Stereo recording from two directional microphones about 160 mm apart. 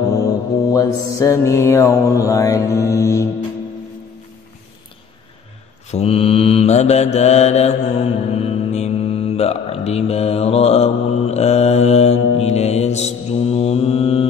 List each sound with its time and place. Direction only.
0.7 s mantra: 20° left (ahead or behind)
5.9 s mantra: 40° left (ahead or behind)